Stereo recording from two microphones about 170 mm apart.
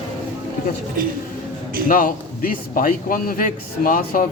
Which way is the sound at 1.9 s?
55° left (ahead or behind).